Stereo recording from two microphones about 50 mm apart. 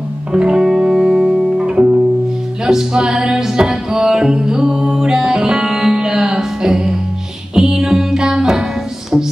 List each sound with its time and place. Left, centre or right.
0.3 s music: centre
1.6 s music: right